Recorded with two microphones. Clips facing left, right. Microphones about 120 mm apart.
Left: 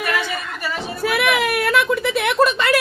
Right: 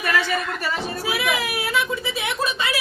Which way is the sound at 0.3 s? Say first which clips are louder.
Right 2 dB; centre (ahead or behind).